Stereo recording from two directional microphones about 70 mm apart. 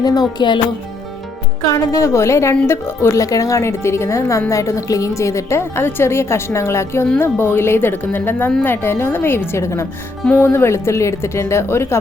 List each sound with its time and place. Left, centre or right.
0.0 s speech: left
1.6 s a woman's voice: left
3.2 s a woman's voice: left